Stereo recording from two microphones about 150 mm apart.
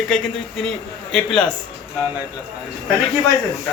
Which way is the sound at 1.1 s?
5° left (ahead or behind).